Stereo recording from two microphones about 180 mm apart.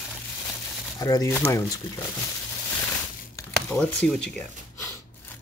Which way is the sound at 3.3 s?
10° left (ahead or behind).